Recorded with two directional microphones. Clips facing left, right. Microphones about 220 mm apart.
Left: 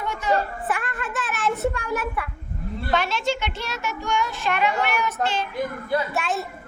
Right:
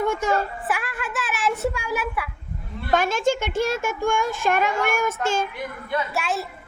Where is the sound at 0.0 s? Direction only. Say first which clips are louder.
Right 3 dB; 45° right (ahead or behind).